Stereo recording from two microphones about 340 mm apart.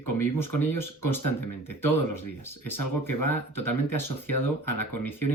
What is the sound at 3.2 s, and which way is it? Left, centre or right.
Speech, centre.